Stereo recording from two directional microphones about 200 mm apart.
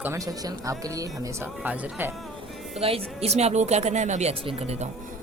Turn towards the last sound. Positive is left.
turn(degrees=-30)  # may be behind; listen again after turning